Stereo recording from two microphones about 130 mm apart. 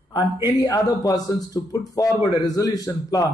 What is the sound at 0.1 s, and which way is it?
A man's voice, 30° left (ahead or behind).